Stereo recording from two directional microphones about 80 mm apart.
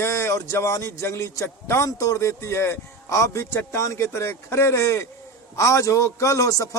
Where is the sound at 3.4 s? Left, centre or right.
Left.